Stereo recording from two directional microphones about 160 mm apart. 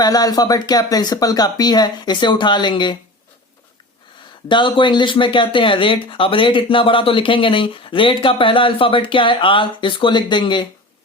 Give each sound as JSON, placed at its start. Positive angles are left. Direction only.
{"t": 0.0, "sound": "speech", "side_deg": 25}
{"t": 4.4, "sound": "speech", "side_deg": 30}